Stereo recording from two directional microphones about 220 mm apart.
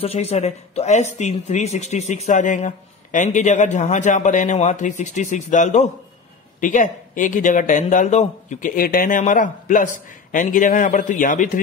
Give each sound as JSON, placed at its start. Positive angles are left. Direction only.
{"t": 0.0, "sound": "speech", "side_deg": 30}